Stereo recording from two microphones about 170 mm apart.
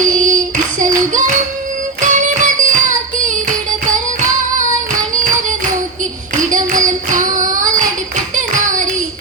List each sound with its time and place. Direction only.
0.0 s child singing: 50° right (ahead or behind)
2.0 s music: 45° right (ahead or behind)
3.8 s music: 50° right (ahead or behind)
6.3 s child singing: 50° right (ahead or behind)